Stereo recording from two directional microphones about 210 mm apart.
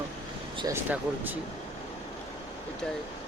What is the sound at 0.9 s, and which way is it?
Speech, 10° right (ahead or behind).